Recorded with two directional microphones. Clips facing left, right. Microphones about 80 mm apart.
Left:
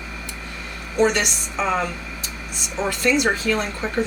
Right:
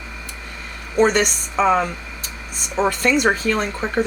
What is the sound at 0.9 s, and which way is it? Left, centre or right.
Speech, right.